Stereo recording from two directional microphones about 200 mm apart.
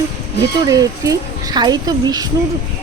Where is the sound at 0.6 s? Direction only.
15° right (ahead or behind).